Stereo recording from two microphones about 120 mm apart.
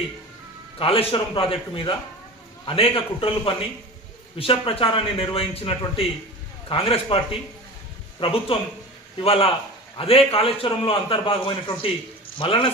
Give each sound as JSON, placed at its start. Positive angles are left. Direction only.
{"t": 0.8, "sound": "a man's voice", "side_deg": 50}